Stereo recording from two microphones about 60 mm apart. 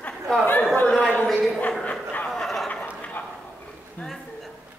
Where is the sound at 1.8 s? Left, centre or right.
Left.